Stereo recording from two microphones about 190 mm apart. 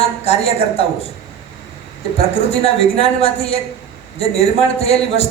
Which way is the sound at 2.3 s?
30° left (ahead or behind).